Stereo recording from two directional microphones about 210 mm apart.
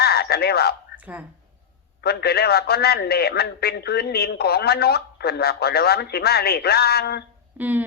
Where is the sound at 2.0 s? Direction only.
50° left (ahead or behind).